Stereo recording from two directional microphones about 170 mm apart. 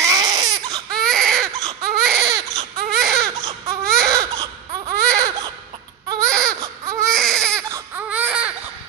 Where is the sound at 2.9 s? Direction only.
Centre (ahead or behind).